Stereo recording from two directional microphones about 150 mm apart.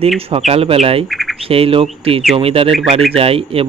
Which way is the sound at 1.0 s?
Centre (ahead or behind).